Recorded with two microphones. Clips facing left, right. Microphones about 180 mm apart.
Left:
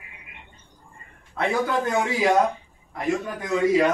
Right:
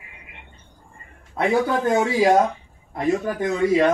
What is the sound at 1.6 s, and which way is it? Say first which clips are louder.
Speech: right 4 dB; 30° right (ahead or behind).